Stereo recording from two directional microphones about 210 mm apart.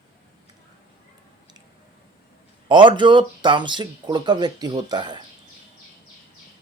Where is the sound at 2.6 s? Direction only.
25° right (ahead or behind).